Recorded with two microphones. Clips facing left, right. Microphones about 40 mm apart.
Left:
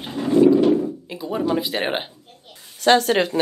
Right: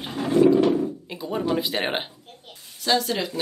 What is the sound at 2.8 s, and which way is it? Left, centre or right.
Speech, left.